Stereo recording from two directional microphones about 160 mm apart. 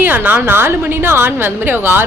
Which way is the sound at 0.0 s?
10° right (ahead or behind).